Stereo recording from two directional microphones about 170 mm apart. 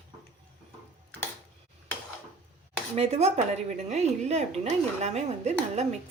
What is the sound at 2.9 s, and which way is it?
A woman's voice, 35° right (ahead or behind).